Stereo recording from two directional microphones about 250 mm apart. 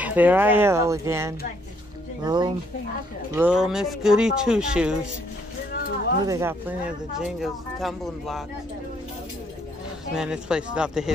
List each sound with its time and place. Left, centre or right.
0.0 s speech: centre
3.3 s speech: centre
5.7 s a sound: left
6.2 s speech: centre
10.1 s speech: centre